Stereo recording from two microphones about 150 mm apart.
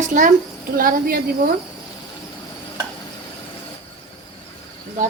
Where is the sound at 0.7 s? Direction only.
70° right (ahead or behind).